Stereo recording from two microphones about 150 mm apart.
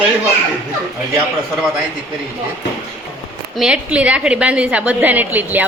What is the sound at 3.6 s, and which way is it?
A woman's voice, 5° right (ahead or behind).